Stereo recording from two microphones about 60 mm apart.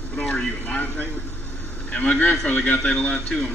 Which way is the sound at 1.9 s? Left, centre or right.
Left.